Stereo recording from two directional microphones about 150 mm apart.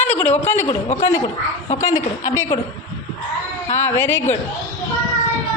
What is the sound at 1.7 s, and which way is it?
Speech, 20° left (ahead or behind).